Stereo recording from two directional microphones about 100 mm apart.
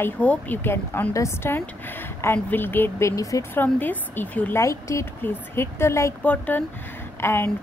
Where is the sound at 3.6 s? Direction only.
20° left (ahead or behind).